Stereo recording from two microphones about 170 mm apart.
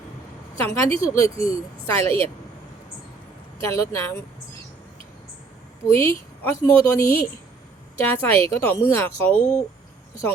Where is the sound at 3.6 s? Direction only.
15° left (ahead or behind).